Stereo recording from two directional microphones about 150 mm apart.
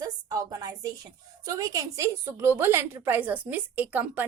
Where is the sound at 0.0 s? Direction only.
25° right (ahead or behind).